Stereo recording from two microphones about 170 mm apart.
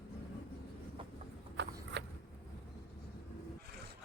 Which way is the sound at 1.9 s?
80° right.